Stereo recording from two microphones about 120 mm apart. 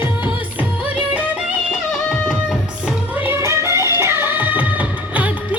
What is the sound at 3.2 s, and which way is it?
Music, 25° right (ahead or behind).